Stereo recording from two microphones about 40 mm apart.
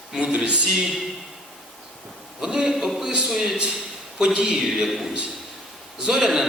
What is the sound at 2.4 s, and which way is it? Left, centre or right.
Speech, centre.